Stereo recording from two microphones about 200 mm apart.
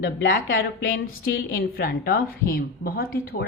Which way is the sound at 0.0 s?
50° left (ahead or behind).